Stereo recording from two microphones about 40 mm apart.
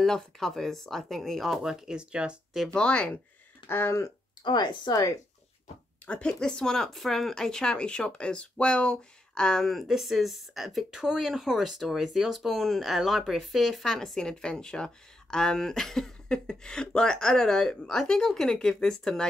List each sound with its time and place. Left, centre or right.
0.0 s speech: centre
1.6 s speech: centre
2.0 s speech: right
2.7 s speech: left
3.6 s speech: left
6.2 s speech: centre
9.8 s speech: centre
10.9 s speech: centre
13.9 s speech: centre